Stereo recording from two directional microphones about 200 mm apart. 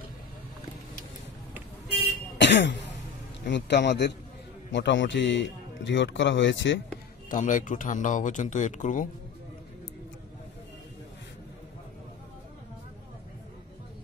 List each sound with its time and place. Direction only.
2.3 s cough: 60° left (ahead or behind)
3.4 s speech: 60° left (ahead or behind)
7.2 s speech: 40° left (ahead or behind)